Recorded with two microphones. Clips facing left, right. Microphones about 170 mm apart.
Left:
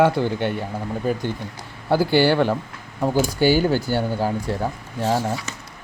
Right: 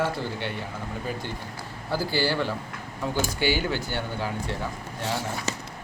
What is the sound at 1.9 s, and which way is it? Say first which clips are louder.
Speech: left 9 dB; 60° left (ahead or behind).